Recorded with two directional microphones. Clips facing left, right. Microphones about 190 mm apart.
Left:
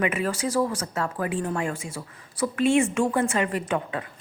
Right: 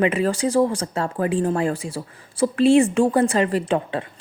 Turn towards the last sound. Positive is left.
turn(degrees=-30)  # may be behind; listen again after turning